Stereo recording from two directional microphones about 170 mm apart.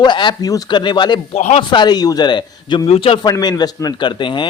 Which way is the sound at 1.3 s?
40° left (ahead or behind).